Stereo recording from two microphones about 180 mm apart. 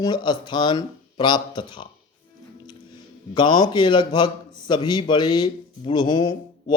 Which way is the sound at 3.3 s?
25° left (ahead or behind).